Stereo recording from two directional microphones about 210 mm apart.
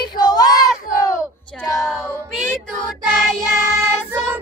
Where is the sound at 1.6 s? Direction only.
15° left (ahead or behind).